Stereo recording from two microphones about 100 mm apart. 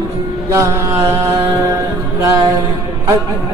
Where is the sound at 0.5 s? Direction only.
30° right (ahead or behind).